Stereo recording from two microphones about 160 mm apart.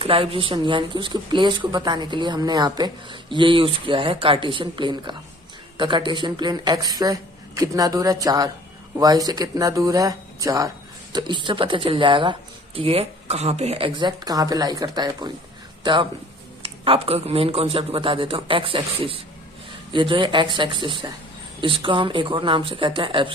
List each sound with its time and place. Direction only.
0.0 s speech: 35° right (ahead or behind)